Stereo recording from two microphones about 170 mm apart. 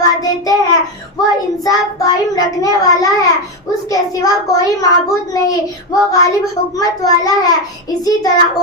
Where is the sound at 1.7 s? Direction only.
20° left (ahead or behind).